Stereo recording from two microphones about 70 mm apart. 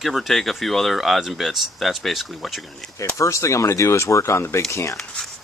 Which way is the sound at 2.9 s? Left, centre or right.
Left.